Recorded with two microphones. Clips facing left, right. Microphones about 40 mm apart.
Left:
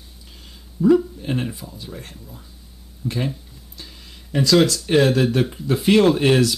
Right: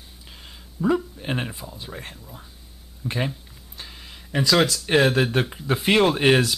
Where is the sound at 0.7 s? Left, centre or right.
Right.